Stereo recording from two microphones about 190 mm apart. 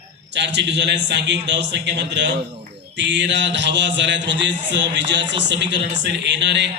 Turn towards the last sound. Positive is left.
turn(degrees=-65)  # may be behind; listen again after turning